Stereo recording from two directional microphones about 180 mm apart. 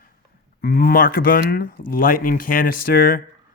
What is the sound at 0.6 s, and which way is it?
Speech, 55° left (ahead or behind).